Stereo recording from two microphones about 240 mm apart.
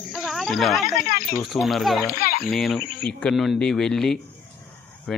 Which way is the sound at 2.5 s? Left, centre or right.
Centre.